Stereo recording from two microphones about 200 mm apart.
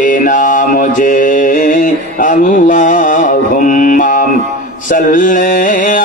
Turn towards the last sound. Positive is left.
turn(degrees=40)  # may be behind; listen again after turning